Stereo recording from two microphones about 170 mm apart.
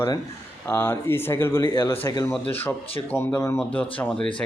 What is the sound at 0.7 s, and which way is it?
Speech, 15° left (ahead or behind).